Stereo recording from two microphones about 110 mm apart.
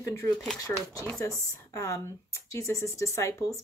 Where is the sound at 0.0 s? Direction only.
30° left (ahead or behind).